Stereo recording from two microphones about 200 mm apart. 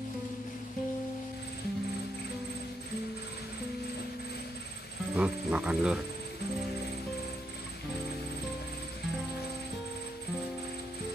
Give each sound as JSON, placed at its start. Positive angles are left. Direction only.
{"t": 5.1, "sound": "speech", "side_deg": -5}